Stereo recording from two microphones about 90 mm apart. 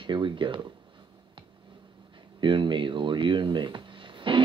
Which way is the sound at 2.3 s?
60° right (ahead or behind).